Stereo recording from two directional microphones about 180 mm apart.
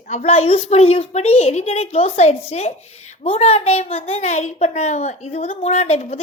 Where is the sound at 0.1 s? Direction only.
35° left (ahead or behind).